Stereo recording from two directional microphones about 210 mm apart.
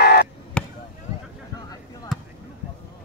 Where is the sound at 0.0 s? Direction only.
45° left (ahead or behind).